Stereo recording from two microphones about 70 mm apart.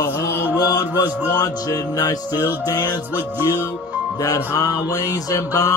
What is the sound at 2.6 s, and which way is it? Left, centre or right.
Speech, left.